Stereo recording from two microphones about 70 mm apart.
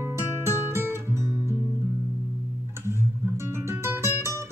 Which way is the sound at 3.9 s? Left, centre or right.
Right.